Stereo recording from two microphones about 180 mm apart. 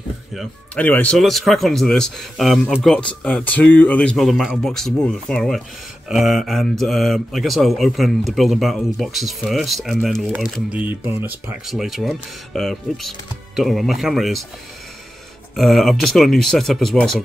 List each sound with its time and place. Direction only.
0.4 s speech: 10° left (ahead or behind)
15.5 s speech: centre (ahead or behind)